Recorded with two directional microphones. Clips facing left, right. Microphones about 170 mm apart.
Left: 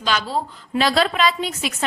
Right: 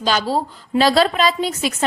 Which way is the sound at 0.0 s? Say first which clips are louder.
Right 4 dB; 35° right (ahead or behind).